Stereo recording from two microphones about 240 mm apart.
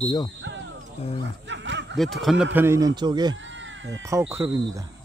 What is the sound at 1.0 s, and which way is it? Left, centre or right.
Speech, left.